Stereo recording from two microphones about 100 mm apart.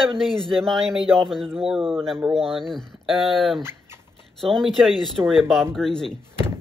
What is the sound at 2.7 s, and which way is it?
Speech, centre (ahead or behind).